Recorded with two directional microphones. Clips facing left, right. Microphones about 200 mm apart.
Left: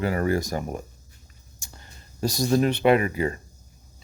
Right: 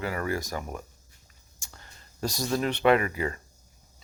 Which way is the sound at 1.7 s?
20° left (ahead or behind).